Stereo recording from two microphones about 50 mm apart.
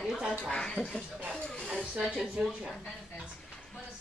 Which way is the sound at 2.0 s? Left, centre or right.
Centre.